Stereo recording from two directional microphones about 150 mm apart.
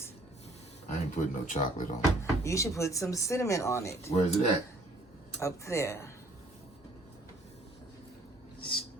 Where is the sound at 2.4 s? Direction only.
20° left (ahead or behind).